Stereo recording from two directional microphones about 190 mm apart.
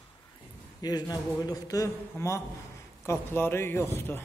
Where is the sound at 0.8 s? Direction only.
20° left (ahead or behind).